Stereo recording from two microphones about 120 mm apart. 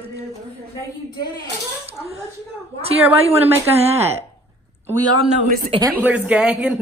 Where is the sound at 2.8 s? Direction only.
55° right (ahead or behind).